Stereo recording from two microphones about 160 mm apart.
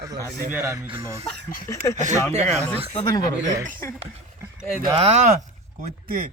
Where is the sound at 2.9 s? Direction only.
25° left (ahead or behind).